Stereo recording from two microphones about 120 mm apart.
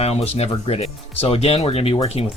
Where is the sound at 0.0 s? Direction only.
60° left (ahead or behind).